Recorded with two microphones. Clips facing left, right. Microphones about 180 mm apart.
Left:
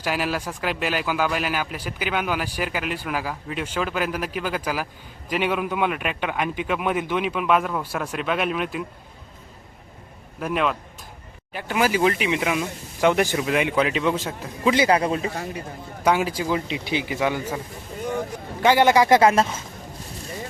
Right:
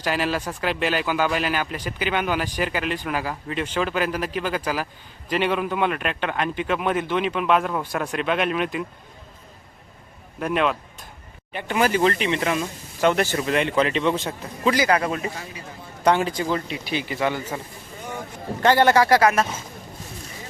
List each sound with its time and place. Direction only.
0.0 s speech: 5° left (ahead or behind)
10.4 s speech: centre (ahead or behind)
14.7 s speech: 25° left (ahead or behind)
16.0 s speech: 5° left (ahead or behind)
18.6 s speech: 15° left (ahead or behind)